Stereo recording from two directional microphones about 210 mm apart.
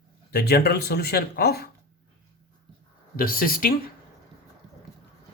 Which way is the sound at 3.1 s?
45° left (ahead or behind).